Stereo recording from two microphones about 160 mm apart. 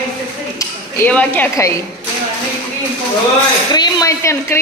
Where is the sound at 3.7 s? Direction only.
25° left (ahead or behind).